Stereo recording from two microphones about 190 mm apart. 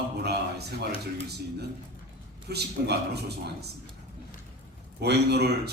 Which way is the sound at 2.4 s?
60° right (ahead or behind).